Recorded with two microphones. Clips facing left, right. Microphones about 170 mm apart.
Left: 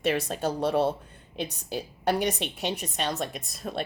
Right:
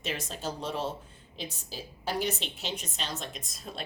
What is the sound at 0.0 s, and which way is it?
Speech, 60° left (ahead or behind).